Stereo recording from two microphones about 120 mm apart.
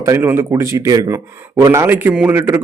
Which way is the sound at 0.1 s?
20° right (ahead or behind).